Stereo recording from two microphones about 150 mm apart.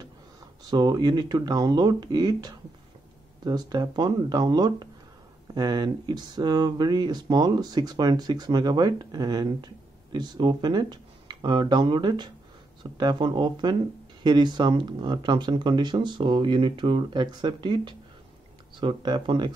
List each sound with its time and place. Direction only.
0.7 s speech: 25° right (ahead or behind)